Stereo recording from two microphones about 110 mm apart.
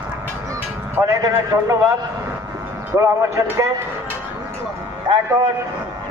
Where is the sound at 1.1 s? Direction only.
30° right (ahead or behind).